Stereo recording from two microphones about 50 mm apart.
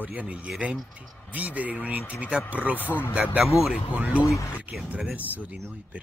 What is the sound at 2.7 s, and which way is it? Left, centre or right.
Speech, left.